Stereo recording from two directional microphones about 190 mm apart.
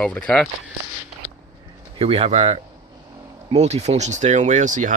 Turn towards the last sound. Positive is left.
turn(degrees=-40)  # may be behind; listen again after turning